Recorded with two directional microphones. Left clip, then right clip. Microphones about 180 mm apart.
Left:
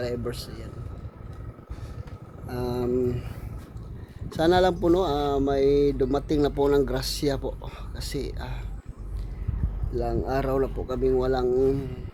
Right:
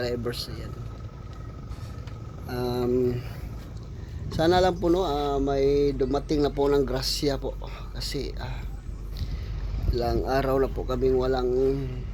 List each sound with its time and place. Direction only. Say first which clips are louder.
0.0 s speech: right 1 dB; centre (ahead or behind)
2.5 s speech: right 1 dB; 5° left (ahead or behind)
4.3 s speech: left 1 dB; 15° left (ahead or behind)
4.9 s speech: left 1 dB; 25° left (ahead or behind)
9.9 s speech: right 2 dB; centre (ahead or behind); by 11.6 s 20° left (ahead or behind)